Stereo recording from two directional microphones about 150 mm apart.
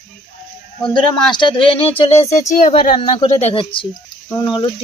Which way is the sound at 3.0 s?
35° left (ahead or behind).